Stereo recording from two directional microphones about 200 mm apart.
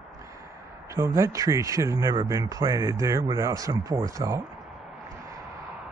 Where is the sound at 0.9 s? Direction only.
15° right (ahead or behind).